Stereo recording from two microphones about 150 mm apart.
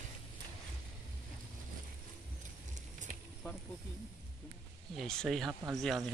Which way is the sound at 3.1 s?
70° right (ahead or behind).